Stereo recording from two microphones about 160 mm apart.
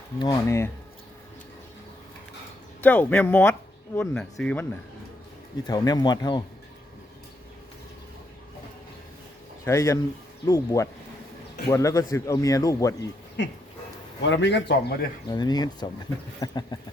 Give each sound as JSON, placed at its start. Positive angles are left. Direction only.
{"t": 0.2, "sound": "speech", "side_deg": 20}
{"t": 2.8, "sound": "speech", "side_deg": 10}
{"t": 5.6, "sound": "speech", "side_deg": 25}
{"t": 9.6, "sound": "speech", "side_deg": 20}
{"t": 13.4, "sound": "a man's voice", "side_deg": 90}
{"t": 15.3, "sound": "speech", "side_deg": 25}